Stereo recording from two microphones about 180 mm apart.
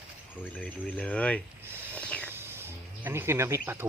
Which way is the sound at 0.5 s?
5° left (ahead or behind).